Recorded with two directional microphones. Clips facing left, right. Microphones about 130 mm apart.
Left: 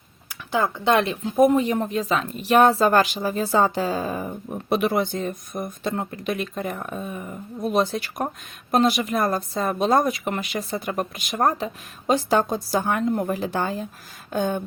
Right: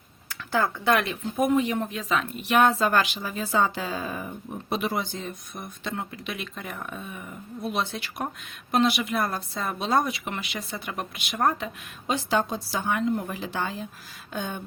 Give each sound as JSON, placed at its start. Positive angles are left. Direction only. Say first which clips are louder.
{"t": 0.3, "sound": "speech", "louder": "left 2 dB", "side_deg": 20}
{"t": 1.4, "sound": "a woman's voice", "louder": "left 5 dB", "side_deg": 40}
{"t": 4.7, "sound": "a woman's voice", "louder": "left 7 dB", "side_deg": 60}